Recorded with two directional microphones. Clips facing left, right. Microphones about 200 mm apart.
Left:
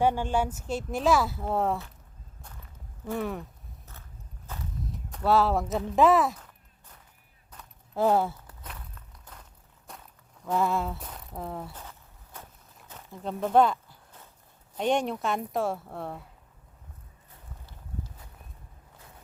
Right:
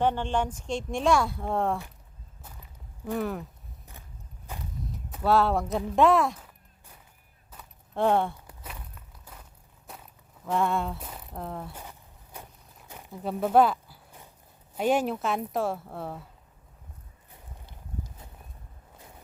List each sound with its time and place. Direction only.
0.0 s speech: 10° left (ahead or behind)
3.1 s speech: centre (ahead or behind)
3.9 s biting: 15° right (ahead or behind)
4.8 s a sound: centre (ahead or behind)
8.4 s walk: 10° right (ahead or behind)
10.4 s speech: centre (ahead or behind)
11.7 s a sound: 10° right (ahead or behind)
14.8 s speech: 5° right (ahead or behind)
17.7 s a sound: 20° right (ahead or behind)